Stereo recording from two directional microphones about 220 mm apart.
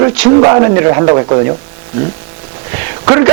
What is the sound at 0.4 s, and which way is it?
Speech, 20° right (ahead or behind).